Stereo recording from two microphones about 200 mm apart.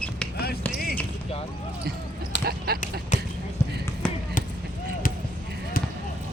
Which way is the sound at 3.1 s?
35° left (ahead or behind).